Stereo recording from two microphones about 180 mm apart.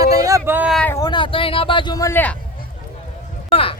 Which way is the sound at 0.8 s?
10° left (ahead or behind).